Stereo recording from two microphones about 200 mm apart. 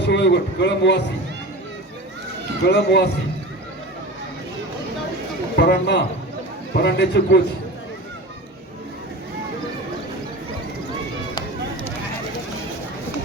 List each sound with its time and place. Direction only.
0.0 s a man's voice: 60° left (ahead or behind)
2.6 s a man's voice: 55° left (ahead or behind)
5.5 s a man's voice: 55° left (ahead or behind)